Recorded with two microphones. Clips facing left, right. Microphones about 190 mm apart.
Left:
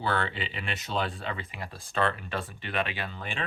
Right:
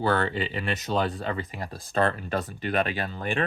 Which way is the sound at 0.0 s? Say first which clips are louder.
Right 5 dB; 45° right (ahead or behind).